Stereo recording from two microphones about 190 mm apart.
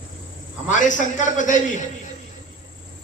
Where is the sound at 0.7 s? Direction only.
40° left (ahead or behind).